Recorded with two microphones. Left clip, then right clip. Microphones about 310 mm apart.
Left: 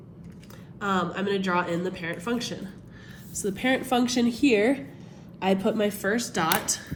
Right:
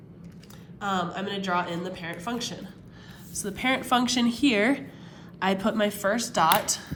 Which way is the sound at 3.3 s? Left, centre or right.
Centre.